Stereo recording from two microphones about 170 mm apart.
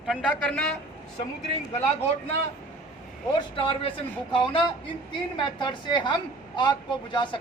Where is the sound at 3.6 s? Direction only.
30° left (ahead or behind).